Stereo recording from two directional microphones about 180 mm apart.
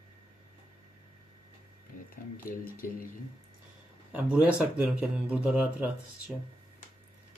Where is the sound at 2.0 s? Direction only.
50° left (ahead or behind).